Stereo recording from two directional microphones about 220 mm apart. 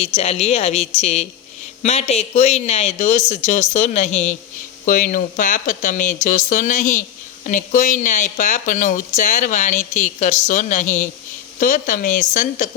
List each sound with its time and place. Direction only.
0.0 s a woman's voice: 30° left (ahead or behind)